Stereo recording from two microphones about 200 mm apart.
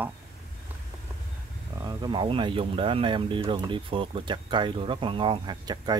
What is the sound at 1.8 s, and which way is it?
Speech, 20° right (ahead or behind).